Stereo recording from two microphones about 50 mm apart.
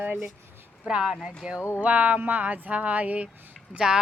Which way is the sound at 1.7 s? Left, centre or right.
Right.